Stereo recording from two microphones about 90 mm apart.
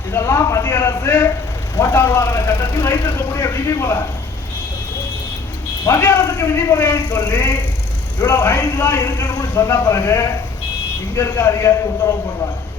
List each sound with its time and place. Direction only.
0.1 s a man's voice: 30° left (ahead or behind)
5.8 s a man's voice: 30° left (ahead or behind)